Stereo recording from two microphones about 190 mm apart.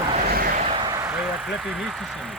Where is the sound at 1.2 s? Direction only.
Centre (ahead or behind).